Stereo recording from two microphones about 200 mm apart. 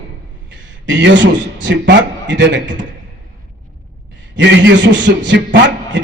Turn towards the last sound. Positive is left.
turn(degrees=-65)  # may be behind; listen again after turning